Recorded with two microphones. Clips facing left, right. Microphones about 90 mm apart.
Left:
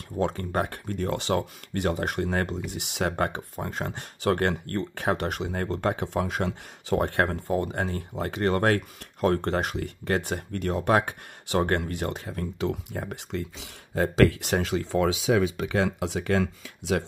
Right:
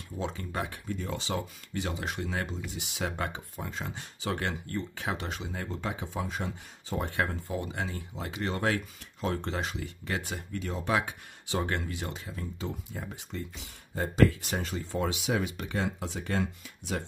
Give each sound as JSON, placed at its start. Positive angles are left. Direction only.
{"t": 0.2, "sound": "speech", "side_deg": 55}